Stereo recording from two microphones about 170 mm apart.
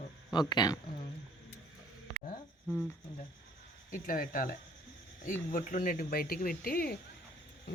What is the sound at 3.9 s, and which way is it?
Speech, 55° left (ahead or behind).